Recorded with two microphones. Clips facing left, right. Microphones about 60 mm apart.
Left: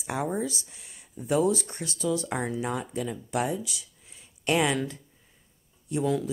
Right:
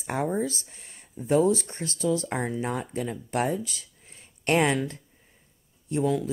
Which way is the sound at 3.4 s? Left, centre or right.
Right.